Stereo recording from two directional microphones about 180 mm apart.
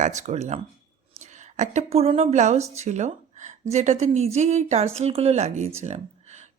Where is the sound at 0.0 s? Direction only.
40° right (ahead or behind).